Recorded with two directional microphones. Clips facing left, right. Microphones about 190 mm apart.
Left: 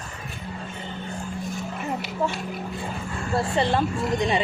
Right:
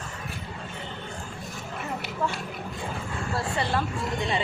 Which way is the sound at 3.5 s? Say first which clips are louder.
Left 6 dB; 20° left (ahead or behind).